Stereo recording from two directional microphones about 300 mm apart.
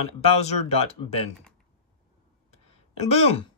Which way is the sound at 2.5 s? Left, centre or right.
Left.